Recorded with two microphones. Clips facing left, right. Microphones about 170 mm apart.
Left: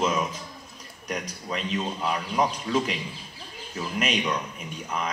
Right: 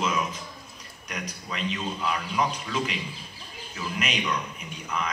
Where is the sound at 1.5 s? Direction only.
45° left (ahead or behind).